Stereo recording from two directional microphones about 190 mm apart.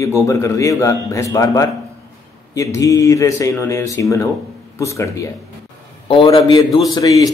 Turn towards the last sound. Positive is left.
turn(degrees=20)  # may be behind; listen again after turning